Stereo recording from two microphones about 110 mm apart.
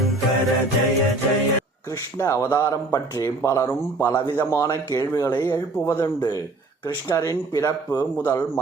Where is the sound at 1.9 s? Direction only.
25° left (ahead or behind).